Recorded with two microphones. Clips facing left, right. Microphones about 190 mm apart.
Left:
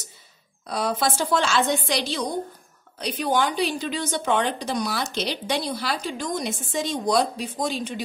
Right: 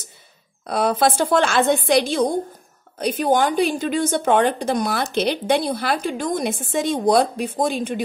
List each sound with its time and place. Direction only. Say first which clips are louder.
0.7 s a woman's voice: right 6 dB; 55° right (ahead or behind)